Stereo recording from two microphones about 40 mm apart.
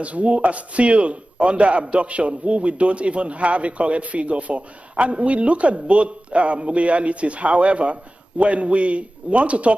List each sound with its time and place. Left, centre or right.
0.0 s a man's voice: right